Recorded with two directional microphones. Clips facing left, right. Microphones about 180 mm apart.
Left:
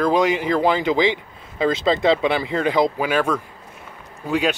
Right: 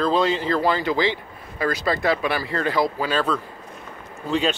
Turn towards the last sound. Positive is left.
turn(degrees=10)  # may be behind; listen again after turning